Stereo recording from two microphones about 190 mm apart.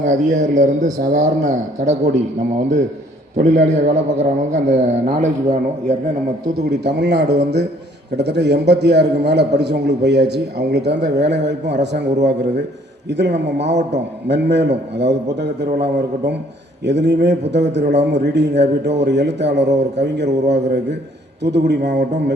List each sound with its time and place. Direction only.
0.0 s a man's voice: 40° right (ahead or behind)
6.7 s a man's voice: 60° right (ahead or behind)